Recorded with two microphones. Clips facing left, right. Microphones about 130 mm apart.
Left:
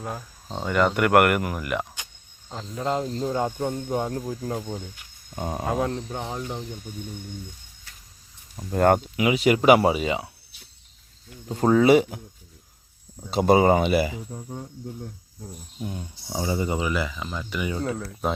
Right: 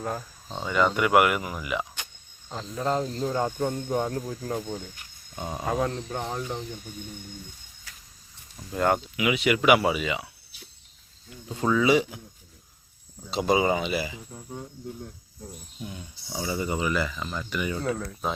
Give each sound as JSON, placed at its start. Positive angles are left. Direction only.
{"t": 0.0, "sound": "speech", "side_deg": 5}
{"t": 0.6, "sound": "speech", "side_deg": 55}
{"t": 2.5, "sound": "speech", "side_deg": 15}
{"t": 5.4, "sound": "speech", "side_deg": 50}
{"t": 5.6, "sound": "speech", "side_deg": 25}
{"t": 6.1, "sound": "speech", "side_deg": 10}
{"t": 8.7, "sound": "speech", "side_deg": 50}
{"t": 9.2, "sound": "speech", "side_deg": 35}
{"t": 11.4, "sound": "speech", "side_deg": 45}
{"t": 13.3, "sound": "speech", "side_deg": 50}
{"t": 15.8, "sound": "speech", "side_deg": 50}
{"t": 16.3, "sound": "speech", "side_deg": 30}